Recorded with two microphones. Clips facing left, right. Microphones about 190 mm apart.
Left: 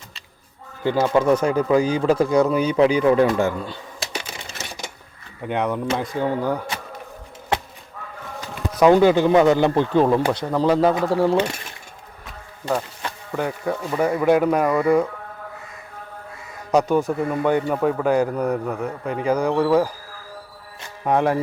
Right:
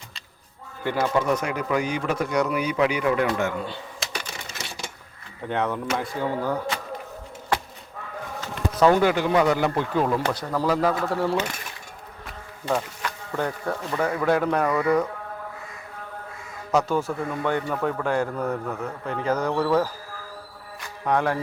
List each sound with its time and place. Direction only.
0.9 s speech: 25° left (ahead or behind)
5.5 s a man's voice: 15° left (ahead or behind)
8.4 s speech: 15° left (ahead or behind)
12.2 s a sound: centre (ahead or behind)
13.3 s a man's voice: 10° left (ahead or behind)
16.7 s a man's voice: 15° left (ahead or behind)
20.8 s music: 20° left (ahead or behind)